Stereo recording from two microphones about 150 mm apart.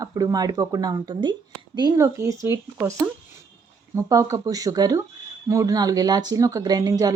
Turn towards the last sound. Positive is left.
turn(degrees=-25)  # may be behind; listen again after turning